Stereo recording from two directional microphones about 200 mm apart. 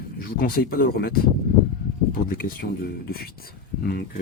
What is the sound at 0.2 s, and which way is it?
Speech, 45° left (ahead or behind).